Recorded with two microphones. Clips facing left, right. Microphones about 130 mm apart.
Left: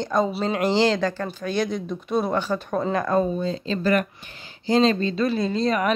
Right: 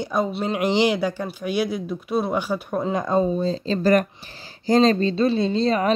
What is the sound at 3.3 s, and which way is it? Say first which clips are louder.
Speech: right 3 dB; 35° right (ahead or behind).